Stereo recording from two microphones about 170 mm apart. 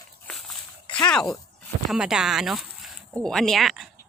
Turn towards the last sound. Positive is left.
turn(degrees=0)  # may be behind; listen again after turning